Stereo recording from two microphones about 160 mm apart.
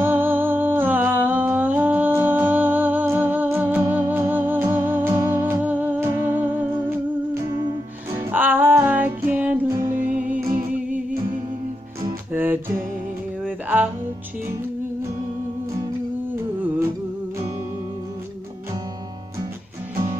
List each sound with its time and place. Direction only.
0.0 s humming: 10° right (ahead or behind)
8.1 s music: 15° right (ahead or behind)
10.2 s music: 55° right (ahead or behind)
12.3 s music: 10° right (ahead or behind)